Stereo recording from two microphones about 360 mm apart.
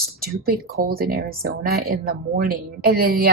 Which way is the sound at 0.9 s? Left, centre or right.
Right.